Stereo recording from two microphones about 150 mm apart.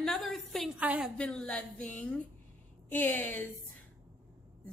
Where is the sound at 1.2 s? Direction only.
5° left (ahead or behind).